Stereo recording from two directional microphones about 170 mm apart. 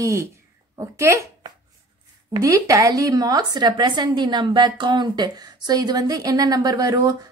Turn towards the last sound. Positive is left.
turn(degrees=-20)  # may be behind; listen again after turning